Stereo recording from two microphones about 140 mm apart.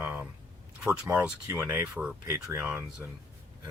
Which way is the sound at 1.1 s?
10° right (ahead or behind).